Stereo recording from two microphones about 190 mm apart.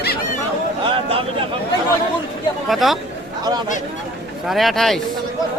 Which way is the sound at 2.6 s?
Centre (ahead or behind).